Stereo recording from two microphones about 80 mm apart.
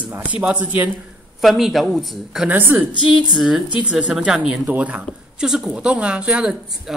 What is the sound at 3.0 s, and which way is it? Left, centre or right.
Speech, centre.